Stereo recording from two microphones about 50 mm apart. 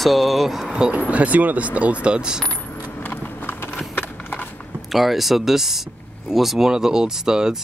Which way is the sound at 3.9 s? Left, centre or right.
Left.